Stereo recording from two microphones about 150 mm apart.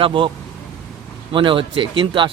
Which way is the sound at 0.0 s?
35° right (ahead or behind).